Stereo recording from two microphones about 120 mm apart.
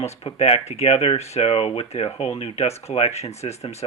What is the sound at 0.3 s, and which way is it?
Speech, 50° left (ahead or behind).